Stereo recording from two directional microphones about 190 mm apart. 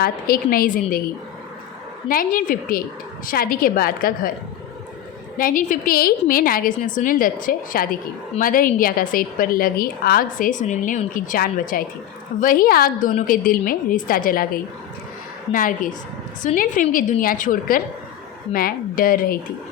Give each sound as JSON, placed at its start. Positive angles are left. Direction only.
{"t": 0.0, "sound": "a woman's voice", "side_deg": 50}
{"t": 2.0, "sound": "a woman's voice", "side_deg": 45}
{"t": 5.4, "sound": "a woman's voice", "side_deg": 45}